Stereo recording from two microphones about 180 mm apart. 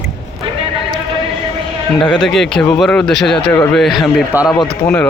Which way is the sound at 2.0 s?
25° left (ahead or behind).